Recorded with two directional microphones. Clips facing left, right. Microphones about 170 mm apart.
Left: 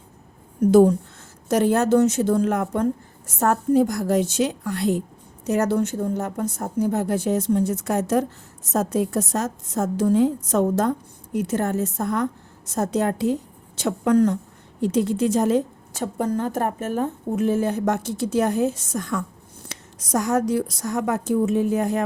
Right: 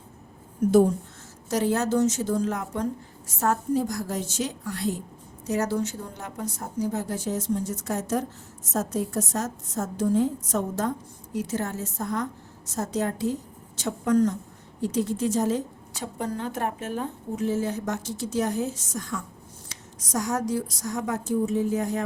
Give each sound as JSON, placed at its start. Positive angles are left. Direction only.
{"t": 1.5, "sound": "a woman's voice", "side_deg": 60}
{"t": 11.3, "sound": "a woman's voice", "side_deg": 60}